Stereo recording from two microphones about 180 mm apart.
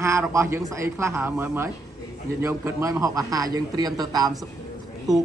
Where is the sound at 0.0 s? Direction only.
15° right (ahead or behind).